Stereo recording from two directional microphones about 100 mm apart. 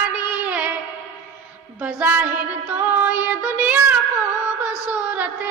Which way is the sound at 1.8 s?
20° right (ahead or behind).